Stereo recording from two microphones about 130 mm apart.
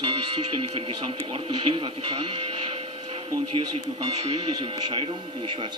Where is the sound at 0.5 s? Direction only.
45° right (ahead or behind).